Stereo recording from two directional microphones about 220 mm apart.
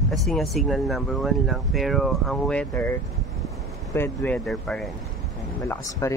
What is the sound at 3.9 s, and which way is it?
Speech, 10° left (ahead or behind).